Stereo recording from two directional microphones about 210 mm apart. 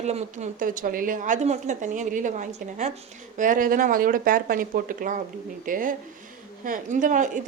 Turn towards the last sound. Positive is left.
turn(degrees=-40)  # may be behind; listen again after turning